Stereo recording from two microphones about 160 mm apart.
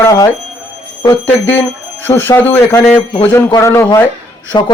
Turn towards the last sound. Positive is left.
turn(degrees=35)  # may be behind; listen again after turning